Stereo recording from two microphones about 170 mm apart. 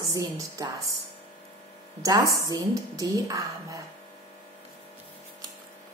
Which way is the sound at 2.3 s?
20° right (ahead or behind).